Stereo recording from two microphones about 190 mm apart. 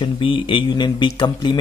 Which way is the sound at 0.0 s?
25° left (ahead or behind).